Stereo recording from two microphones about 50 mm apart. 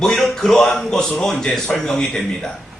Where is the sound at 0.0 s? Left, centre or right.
Centre.